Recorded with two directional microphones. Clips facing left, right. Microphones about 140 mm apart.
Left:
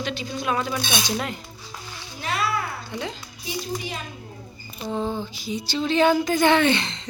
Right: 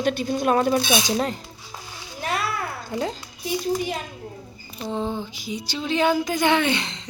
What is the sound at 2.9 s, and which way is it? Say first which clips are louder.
Speech: right 5 dB; 40° right (ahead or behind).